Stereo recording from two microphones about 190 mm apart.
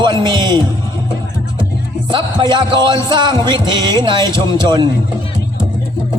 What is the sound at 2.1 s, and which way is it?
Music, 25° right (ahead or behind).